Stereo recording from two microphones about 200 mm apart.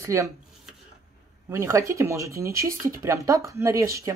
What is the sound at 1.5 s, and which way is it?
Speech, 15° right (ahead or behind).